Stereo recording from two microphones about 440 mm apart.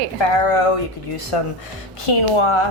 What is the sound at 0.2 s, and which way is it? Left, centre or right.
Speech, left.